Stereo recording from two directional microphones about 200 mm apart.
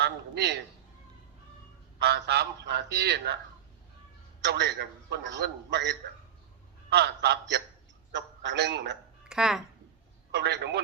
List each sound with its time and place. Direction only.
0.0 s a man's voice: 55° right (ahead or behind)
2.0 s a man's voice: 55° right (ahead or behind)
4.4 s a man's voice: 55° right (ahead or behind)
9.3 s speech: centre (ahead or behind)
10.3 s a man's voice: 55° right (ahead or behind)